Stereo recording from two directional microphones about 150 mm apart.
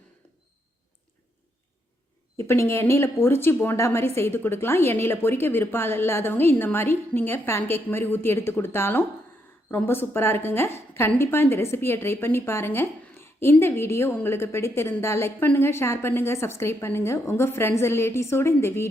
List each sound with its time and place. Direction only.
2.4 s a woman's voice: 15° left (ahead or behind)